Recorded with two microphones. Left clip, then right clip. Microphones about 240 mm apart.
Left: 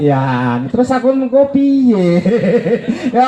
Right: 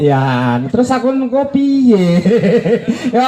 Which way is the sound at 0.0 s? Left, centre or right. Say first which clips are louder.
Right 1 dB; right.